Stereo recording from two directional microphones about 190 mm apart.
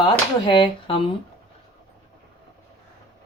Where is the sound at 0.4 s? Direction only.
25° left (ahead or behind).